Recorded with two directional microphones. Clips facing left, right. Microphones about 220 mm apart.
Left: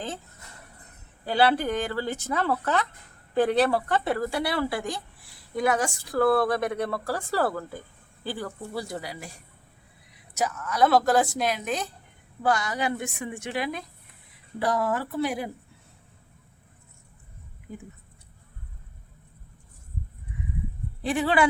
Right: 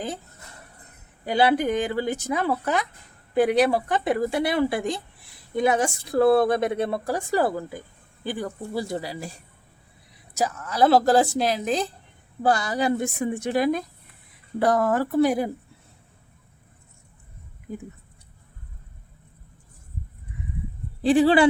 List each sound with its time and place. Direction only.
1.2 s speech: 15° right (ahead or behind)
10.3 s a woman's voice: 30° right (ahead or behind)
21.0 s speech: 30° right (ahead or behind)